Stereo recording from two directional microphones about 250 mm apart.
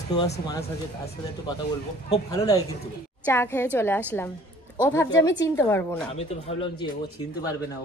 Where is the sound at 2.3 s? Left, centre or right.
Centre.